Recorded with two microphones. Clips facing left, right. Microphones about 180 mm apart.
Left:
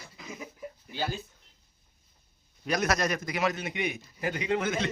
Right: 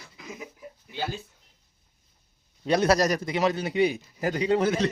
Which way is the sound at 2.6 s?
30° right (ahead or behind).